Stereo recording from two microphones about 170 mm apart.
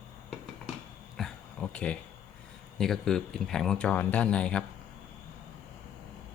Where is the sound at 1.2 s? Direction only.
5° left (ahead or behind).